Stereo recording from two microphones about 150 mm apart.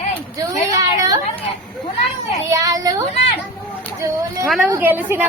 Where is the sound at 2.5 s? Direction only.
25° right (ahead or behind).